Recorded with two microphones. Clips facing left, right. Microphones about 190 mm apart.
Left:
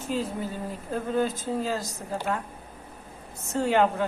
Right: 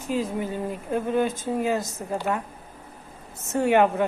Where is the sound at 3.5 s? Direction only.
10° right (ahead or behind).